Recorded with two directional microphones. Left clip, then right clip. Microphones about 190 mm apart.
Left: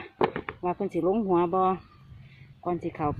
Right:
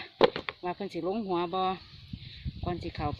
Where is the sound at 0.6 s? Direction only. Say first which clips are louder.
Left 10 dB; centre (ahead or behind).